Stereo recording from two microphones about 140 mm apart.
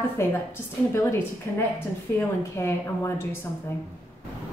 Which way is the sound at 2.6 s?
20° left (ahead or behind).